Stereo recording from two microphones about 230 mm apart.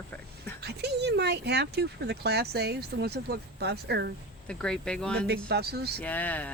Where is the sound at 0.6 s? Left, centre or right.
Right.